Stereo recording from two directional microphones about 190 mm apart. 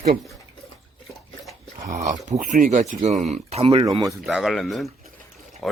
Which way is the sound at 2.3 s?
45° right (ahead or behind).